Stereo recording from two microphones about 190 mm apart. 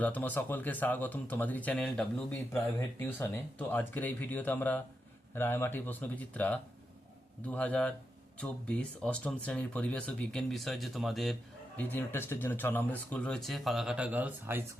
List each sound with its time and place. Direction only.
0.0 s speech: 10° left (ahead or behind); by 14.6 s 10° right (ahead or behind)